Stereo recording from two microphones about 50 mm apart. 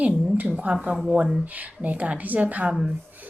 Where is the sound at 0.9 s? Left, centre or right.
Centre.